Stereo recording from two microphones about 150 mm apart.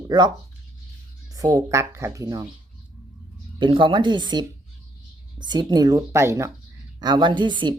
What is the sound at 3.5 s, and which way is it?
A woman's voice, 35° right (ahead or behind).